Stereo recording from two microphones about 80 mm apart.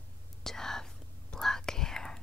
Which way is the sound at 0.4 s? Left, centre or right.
Centre.